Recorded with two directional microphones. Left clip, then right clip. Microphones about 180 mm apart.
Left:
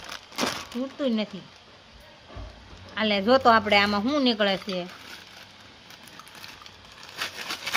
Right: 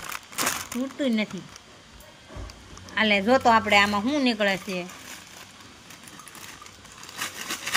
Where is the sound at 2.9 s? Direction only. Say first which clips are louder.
Right 1 dB; 10° left (ahead or behind).